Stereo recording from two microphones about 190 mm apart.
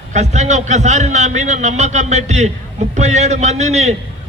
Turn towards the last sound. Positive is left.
turn(degrees=-35)  # may be behind; listen again after turning